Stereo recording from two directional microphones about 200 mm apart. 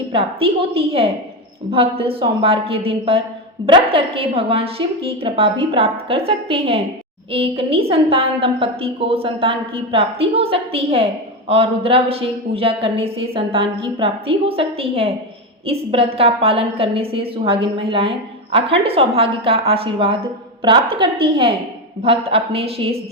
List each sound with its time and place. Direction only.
0.1 s a woman's voice: 30° right (ahead or behind)